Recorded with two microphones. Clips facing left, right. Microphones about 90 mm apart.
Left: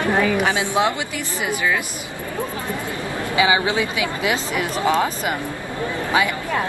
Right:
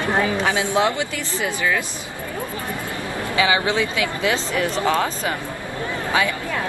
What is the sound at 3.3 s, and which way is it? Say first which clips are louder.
Speech: left 1 dB; 20° left (ahead or behind).